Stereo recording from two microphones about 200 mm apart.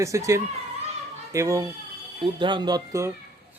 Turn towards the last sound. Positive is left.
turn(degrees=-15)  # may be behind; listen again after turning